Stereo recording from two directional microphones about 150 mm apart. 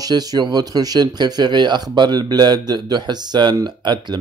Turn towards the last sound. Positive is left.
turn(degrees=-30)  # may be behind; listen again after turning